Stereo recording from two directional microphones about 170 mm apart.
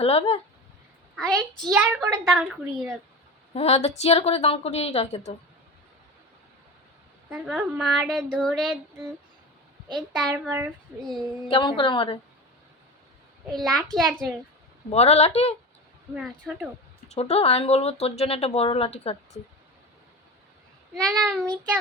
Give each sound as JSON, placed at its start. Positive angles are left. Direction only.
{"t": 0.0, "sound": "speech", "side_deg": 35}
{"t": 1.1, "sound": "a child's voice", "side_deg": 5}
{"t": 3.5, "sound": "speech", "side_deg": 40}
{"t": 7.3, "sound": "a child's voice", "side_deg": -5}
{"t": 10.3, "sound": "a child's voice", "side_deg": -10}
{"t": 11.4, "sound": "a woman's voice", "side_deg": 30}
{"t": 13.5, "sound": "a child's voice", "side_deg": 0}
{"t": 14.8, "sound": "speech", "side_deg": 40}
{"t": 16.1, "sound": "a child's voice", "side_deg": 0}
{"t": 17.1, "sound": "speech", "side_deg": 40}
{"t": 20.9, "sound": "a child's voice", "side_deg": 0}
{"t": 21.4, "sound": "child singing", "side_deg": -25}